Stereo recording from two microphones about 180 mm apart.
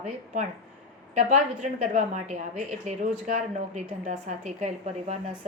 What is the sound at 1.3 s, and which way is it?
A woman's voice, 40° right (ahead or behind).